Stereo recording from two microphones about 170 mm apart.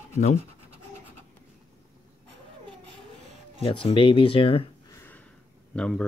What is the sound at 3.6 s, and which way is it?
Speech, 30° left (ahead or behind).